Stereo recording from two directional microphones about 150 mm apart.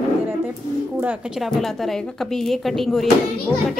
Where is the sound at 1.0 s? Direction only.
5° right (ahead or behind).